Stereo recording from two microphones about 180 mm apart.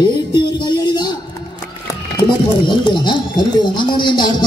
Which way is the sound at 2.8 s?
25° left (ahead or behind).